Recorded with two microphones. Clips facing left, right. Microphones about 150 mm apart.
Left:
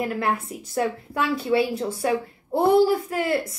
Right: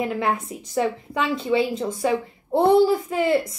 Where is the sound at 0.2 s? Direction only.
5° left (ahead or behind).